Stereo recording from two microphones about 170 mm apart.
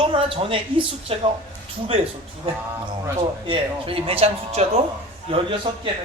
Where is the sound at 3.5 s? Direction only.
35° right (ahead or behind).